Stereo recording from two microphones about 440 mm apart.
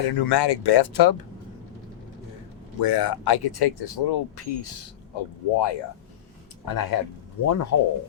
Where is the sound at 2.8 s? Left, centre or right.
Left.